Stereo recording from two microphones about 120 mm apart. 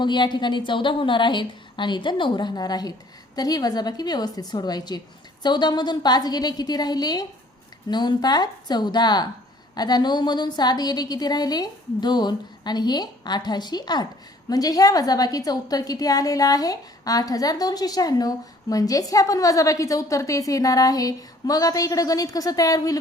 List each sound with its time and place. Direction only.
0.0 s a woman's voice: 40° left (ahead or behind)